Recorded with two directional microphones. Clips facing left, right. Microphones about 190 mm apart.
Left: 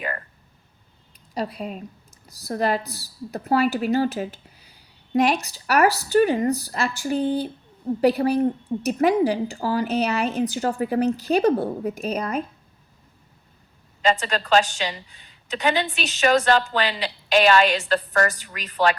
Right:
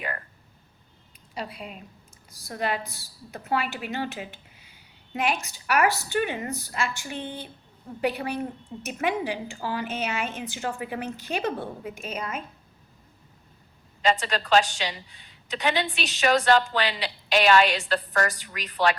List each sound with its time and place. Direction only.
1.3 s a woman's voice: 40° left (ahead or behind)
14.0 s a woman's voice: 45° left (ahead or behind)